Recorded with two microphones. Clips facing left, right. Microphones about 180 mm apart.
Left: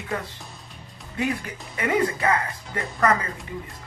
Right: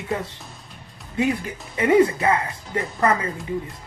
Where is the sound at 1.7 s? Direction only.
25° right (ahead or behind).